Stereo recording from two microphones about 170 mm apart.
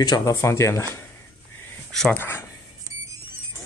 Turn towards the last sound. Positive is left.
turn(degrees=-20)  # may be behind; listen again after turning